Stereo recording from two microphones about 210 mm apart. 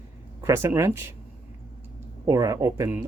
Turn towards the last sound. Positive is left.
turn(degrees=-15)  # may be behind; listen again after turning